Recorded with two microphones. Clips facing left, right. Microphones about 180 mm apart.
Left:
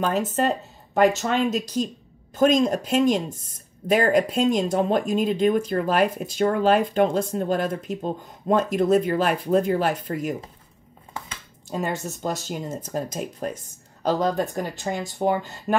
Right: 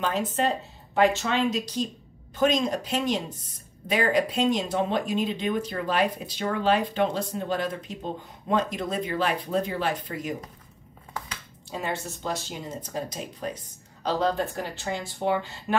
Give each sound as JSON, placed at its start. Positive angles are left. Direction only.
{"t": 0.0, "sound": "speech", "side_deg": 45}
{"t": 11.7, "sound": "speech", "side_deg": 45}